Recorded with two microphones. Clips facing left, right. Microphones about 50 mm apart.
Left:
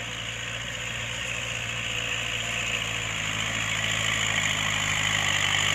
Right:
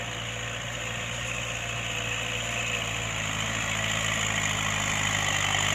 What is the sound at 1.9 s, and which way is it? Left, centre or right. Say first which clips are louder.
Vehicle: left 1 dB; centre.